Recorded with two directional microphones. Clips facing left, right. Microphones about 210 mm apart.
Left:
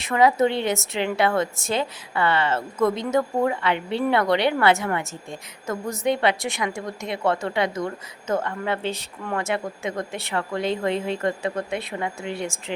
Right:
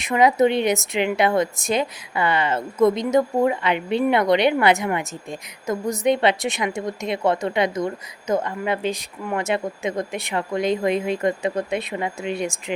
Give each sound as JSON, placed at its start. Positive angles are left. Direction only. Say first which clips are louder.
{"t": 0.0, "sound": "a woman's voice", "louder": "right 2 dB", "side_deg": -15}